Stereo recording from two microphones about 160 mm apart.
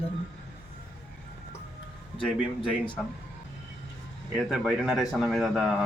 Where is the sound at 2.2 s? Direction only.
5° left (ahead or behind).